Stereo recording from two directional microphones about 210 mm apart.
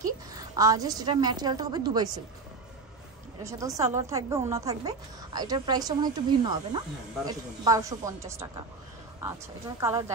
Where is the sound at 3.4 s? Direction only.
15° right (ahead or behind).